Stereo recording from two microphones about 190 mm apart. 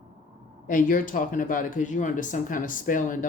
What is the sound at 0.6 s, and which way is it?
Speech, 45° left (ahead or behind).